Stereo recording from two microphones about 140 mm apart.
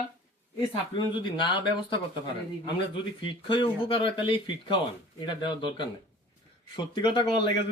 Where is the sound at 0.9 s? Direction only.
30° left (ahead or behind).